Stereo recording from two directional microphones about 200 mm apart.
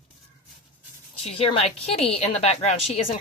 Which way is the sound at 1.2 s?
30° left (ahead or behind).